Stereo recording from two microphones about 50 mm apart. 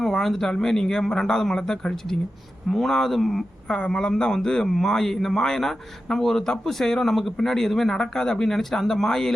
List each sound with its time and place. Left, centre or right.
0.0 s a sound: centre
0.5 s speech: centre
3.7 s speech: centre